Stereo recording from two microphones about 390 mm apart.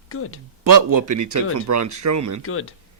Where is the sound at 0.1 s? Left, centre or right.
Left.